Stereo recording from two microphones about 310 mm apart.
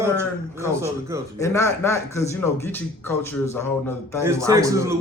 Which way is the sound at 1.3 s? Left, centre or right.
Centre.